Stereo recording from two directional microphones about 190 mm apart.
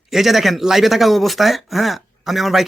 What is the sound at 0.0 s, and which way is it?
Speech, centre (ahead or behind).